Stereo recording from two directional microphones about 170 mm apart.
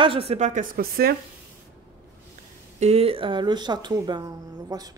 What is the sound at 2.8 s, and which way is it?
Speech, 35° right (ahead or behind).